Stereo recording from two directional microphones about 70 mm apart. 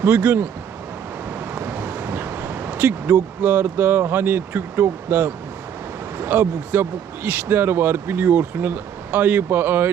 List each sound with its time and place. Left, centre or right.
0.0 s speech: right
1.5 s speech: right